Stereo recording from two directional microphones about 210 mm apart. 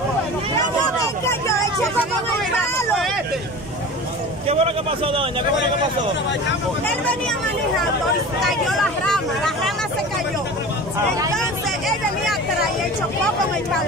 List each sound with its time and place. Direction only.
4.5 s a man's voice: 25° right (ahead or behind)
8.4 s speech: centre (ahead or behind)